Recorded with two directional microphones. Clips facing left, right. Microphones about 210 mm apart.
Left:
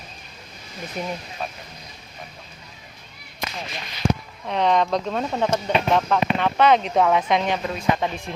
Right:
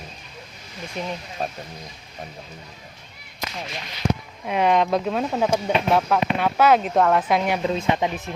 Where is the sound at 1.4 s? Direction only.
40° right (ahead or behind).